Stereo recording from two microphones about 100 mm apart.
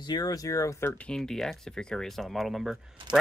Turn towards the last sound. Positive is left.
turn(degrees=-50)  # may be behind; listen again after turning